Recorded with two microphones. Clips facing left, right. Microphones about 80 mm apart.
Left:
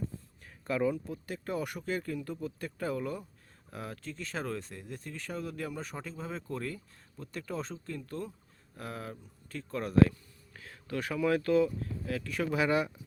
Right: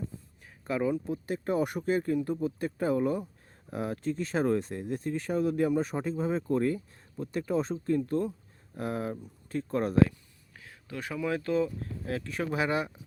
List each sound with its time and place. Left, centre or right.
0.4 s speech: centre
10.5 s speech: centre